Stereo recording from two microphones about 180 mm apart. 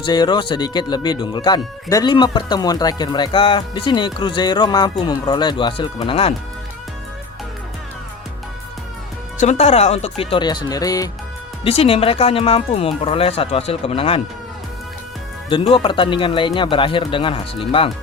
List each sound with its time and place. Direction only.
0.0 s speech: 25° left (ahead or behind)
9.4 s speech: 40° left (ahead or behind); by 11.1 s 20° left (ahead or behind)
11.6 s speech: 30° left (ahead or behind)
15.4 s speech: 30° left (ahead or behind)